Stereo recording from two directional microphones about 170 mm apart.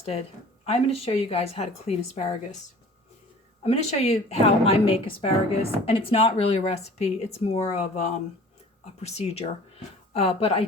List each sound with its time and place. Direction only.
0.0 s a woman's voice: 35° left (ahead or behind)
3.6 s a woman's voice: 40° left (ahead or behind)